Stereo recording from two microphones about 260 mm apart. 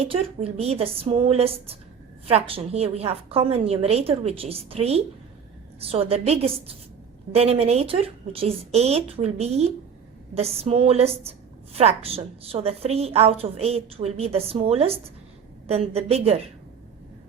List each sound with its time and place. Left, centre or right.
0.0 s a woman's voice: right